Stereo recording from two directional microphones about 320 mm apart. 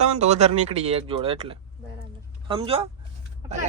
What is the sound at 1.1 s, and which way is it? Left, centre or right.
Speech, centre.